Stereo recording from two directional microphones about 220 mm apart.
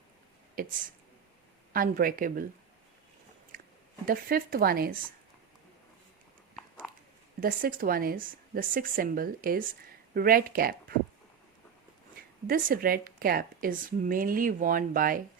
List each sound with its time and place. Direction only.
0.6 s a woman's voice: 40° right (ahead or behind)
3.5 s chewing: 40° right (ahead or behind)
4.0 s a woman's voice: 40° right (ahead or behind)
6.6 s biting: centre (ahead or behind)
7.4 s a woman's voice: 40° right (ahead or behind)
12.5 s a woman's voice: 40° right (ahead or behind)